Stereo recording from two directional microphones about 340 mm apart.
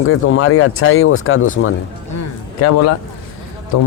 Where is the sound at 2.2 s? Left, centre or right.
Left.